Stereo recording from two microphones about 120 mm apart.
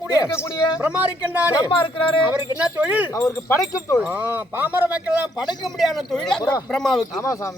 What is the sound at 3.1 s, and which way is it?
Speech, 25° left (ahead or behind).